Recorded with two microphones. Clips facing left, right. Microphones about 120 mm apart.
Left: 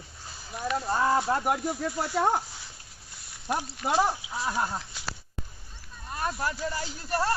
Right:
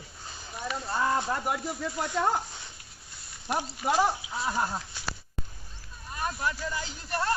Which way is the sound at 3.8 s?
Centre (ahead or behind).